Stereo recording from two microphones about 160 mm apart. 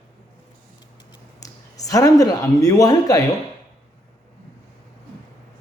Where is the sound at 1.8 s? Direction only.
20° left (ahead or behind).